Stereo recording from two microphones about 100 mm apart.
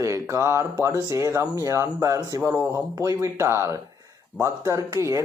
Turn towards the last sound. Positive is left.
turn(degrees=-30)  # may be behind; listen again after turning